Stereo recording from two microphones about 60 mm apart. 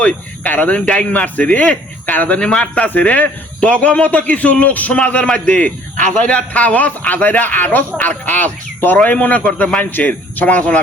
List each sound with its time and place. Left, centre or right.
0.0 s a man's voice: left
2.4 s speech: centre
2.8 s a man's voice: left